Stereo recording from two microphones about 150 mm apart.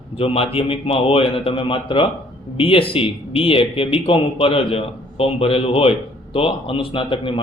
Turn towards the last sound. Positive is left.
turn(degrees=35)  # may be behind; listen again after turning